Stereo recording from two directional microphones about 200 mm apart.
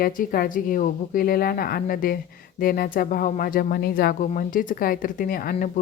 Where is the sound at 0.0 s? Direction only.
45° left (ahead or behind).